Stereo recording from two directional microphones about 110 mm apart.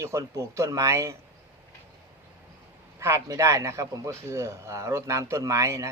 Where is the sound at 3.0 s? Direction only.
25° right (ahead or behind).